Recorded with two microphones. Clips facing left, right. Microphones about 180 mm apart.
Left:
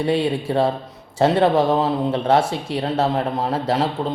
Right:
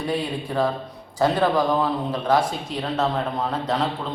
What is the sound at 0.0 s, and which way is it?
A man's voice, 25° left (ahead or behind).